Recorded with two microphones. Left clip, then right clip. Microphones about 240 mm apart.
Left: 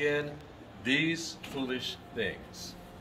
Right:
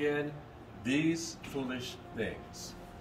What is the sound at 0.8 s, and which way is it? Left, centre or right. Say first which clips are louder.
Speech: left 3 dB; centre.